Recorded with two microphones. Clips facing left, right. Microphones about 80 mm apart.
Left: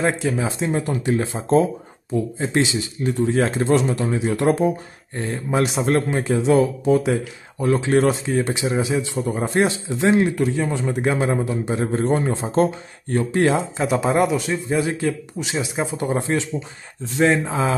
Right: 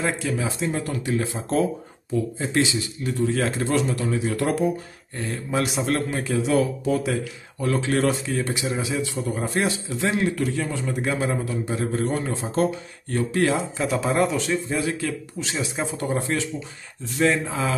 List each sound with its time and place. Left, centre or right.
0.0 s speech: left
14.3 s speech: centre
14.7 s speech: left